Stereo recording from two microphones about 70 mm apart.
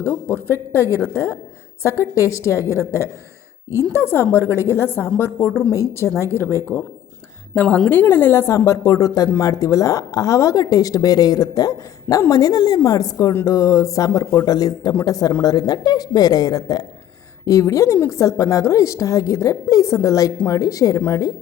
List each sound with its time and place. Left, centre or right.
0.0 s a woman's voice: left
7.5 s a woman's voice: left
17.4 s a woman's voice: left